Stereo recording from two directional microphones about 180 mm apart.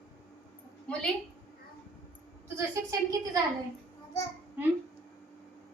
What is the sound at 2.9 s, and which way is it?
Speech, 20° right (ahead or behind).